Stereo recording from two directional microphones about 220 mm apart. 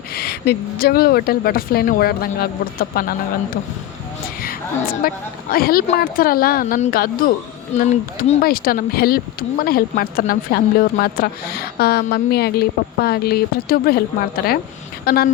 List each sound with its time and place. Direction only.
0.1 s speech: 45° left (ahead or behind)
4.4 s a woman's voice: 40° left (ahead or behind)